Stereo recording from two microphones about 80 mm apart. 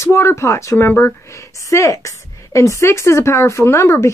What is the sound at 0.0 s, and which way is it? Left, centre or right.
A woman's voice, left.